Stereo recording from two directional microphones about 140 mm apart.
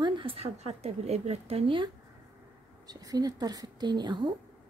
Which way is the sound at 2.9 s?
25° right (ahead or behind).